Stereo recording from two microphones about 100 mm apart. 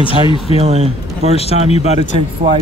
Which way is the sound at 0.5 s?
90° right.